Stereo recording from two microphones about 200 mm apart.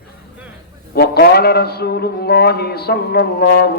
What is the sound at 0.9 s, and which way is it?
A man's voice, 50° left (ahead or behind).